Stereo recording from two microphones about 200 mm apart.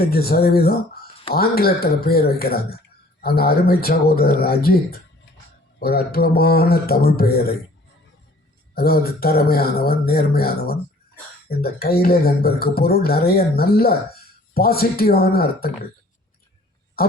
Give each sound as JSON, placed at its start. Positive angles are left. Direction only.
{"t": 0.0, "sound": "speech", "side_deg": 50}
{"t": 8.7, "sound": "speech", "side_deg": 50}